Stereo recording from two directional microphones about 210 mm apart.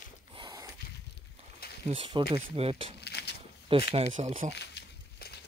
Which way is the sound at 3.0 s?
50° left (ahead or behind).